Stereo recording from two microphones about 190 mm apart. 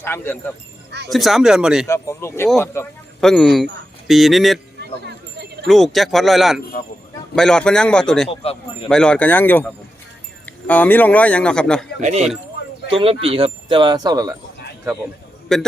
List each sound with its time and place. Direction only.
0.0 s speech: 10° left (ahead or behind)
1.1 s speech: centre (ahead or behind)
1.9 s speech: 15° left (ahead or behind)
3.2 s speech: 5° left (ahead or behind)
4.8 s a sound: 60° right (ahead or behind)
5.6 s speech: centre (ahead or behind)
8.3 s speech: 30° left (ahead or behind)
8.9 s speech: 5° left (ahead or behind)
11.9 s speech: 40° right (ahead or behind)
12.9 s speech: 25° right (ahead or behind)
15.5 s speech: 5° left (ahead or behind)